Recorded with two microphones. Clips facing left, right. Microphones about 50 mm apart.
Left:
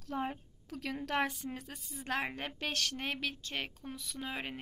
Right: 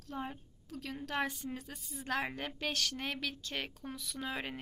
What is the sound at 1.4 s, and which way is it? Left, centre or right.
A woman's voice, left.